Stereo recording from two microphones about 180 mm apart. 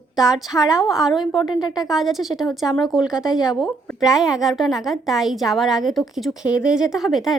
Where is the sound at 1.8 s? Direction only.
Centre (ahead or behind).